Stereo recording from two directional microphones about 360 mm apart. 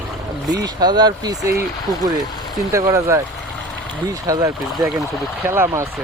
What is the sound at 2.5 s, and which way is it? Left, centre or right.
A man's voice, centre.